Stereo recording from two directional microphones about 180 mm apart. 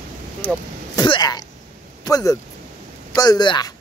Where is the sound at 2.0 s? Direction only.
20° left (ahead or behind).